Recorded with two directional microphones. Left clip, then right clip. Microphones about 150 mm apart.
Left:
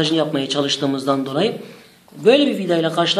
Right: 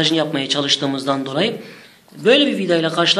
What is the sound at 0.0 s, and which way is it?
A man's voice, centre (ahead or behind).